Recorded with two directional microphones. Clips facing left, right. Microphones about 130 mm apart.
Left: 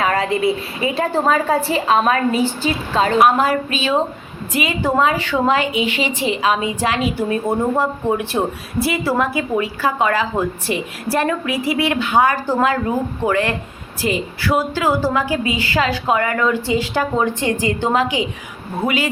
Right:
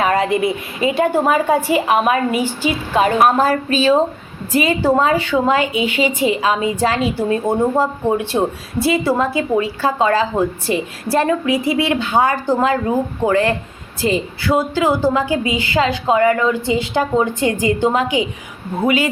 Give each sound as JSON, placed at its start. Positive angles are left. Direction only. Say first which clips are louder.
{"t": 0.0, "sound": "a woman's voice", "louder": "right 2 dB", "side_deg": -20}
{"t": 3.2, "sound": "speech", "louder": "right 1 dB", "side_deg": -40}
{"t": 5.1, "sound": "a woman's voice", "louder": "right 2 dB", "side_deg": 25}
{"t": 6.0, "sound": "a woman's voice", "louder": "right 3 dB", "side_deg": -25}
{"t": 17.8, "sound": "a woman's voice", "louder": "even", "side_deg": 30}
{"t": 18.8, "sound": "a woman's voice", "louder": "right 3 dB", "side_deg": -25}